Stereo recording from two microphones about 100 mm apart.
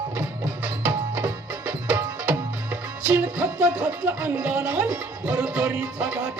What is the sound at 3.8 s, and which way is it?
Speech, 25° right (ahead or behind).